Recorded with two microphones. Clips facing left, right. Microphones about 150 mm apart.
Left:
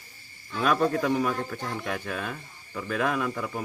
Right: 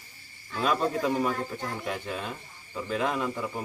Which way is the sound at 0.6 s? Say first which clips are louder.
Left 2 dB; 25° right (ahead or behind).